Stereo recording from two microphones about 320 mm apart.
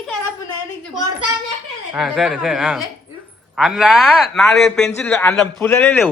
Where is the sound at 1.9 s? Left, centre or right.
Centre.